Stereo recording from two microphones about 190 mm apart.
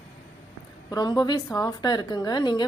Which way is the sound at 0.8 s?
20° left (ahead or behind).